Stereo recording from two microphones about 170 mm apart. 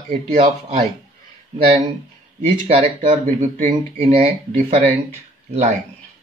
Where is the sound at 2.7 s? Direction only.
35° right (ahead or behind).